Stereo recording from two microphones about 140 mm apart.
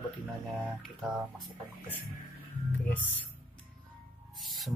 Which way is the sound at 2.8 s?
15° left (ahead or behind).